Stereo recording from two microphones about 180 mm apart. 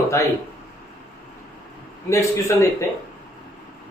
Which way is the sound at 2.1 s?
15° left (ahead or behind).